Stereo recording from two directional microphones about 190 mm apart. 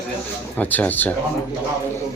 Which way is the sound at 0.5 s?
10° left (ahead or behind).